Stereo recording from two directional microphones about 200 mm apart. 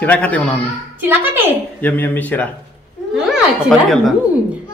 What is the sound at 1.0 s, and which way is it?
Speech, 10° right (ahead or behind).